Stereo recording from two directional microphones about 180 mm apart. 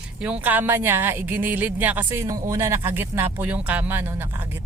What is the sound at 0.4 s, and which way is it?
Speech, 10° right (ahead or behind).